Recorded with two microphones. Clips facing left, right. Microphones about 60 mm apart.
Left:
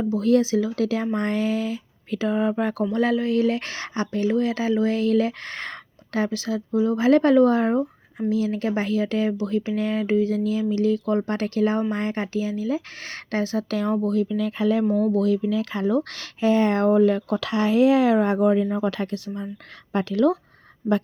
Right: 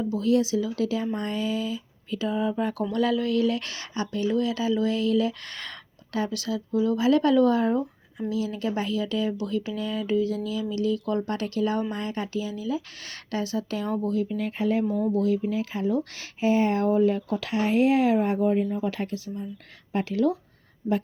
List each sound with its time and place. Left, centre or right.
0.1 s speech: left
2.9 s speech: left
14.0 s speech: left
14.8 s speech: left
19.9 s speech: left
20.8 s speech: left